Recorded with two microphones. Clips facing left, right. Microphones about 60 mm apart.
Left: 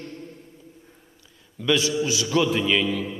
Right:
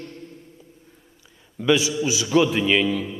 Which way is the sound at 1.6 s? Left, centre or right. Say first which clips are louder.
Right 2 dB; centre.